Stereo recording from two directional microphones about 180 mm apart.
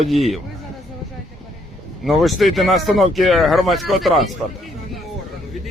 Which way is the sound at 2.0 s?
Centre (ahead or behind).